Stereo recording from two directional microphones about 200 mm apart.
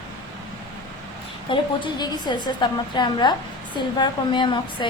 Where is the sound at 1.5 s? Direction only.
25° left (ahead or behind).